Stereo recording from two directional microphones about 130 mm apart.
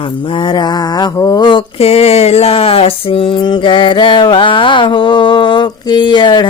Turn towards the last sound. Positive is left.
turn(degrees=35)  # may be behind; listen again after turning